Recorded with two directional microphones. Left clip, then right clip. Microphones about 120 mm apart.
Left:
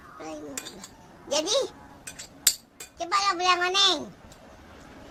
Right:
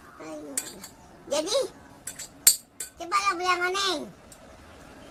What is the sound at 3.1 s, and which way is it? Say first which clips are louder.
Speech: left 1 dB; 15° right (ahead or behind).